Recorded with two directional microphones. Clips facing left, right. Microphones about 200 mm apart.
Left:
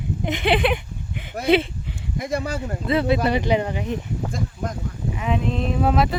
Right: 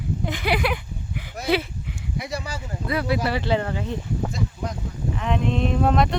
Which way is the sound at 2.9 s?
25° left (ahead or behind).